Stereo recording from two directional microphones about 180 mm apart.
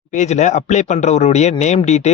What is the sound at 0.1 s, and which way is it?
Speech, 40° left (ahead or behind).